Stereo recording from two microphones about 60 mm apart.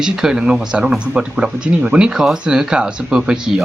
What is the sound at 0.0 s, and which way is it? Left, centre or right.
Speech, centre.